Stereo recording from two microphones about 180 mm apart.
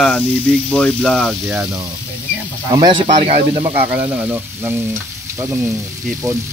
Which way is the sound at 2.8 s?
25° right (ahead or behind).